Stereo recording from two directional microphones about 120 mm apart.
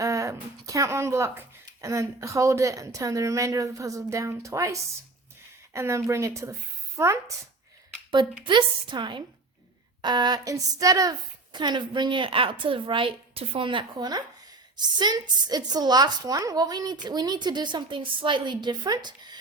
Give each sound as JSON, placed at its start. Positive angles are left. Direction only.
{"t": 0.0, "sound": "speech", "side_deg": -25}
{"t": 8.4, "sound": "a woman's voice", "side_deg": -40}